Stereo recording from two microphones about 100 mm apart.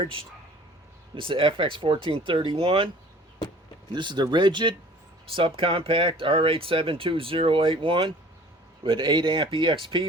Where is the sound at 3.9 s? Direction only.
50° right (ahead or behind).